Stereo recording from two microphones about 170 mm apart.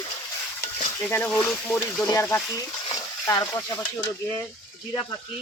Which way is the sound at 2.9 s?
20° left (ahead or behind).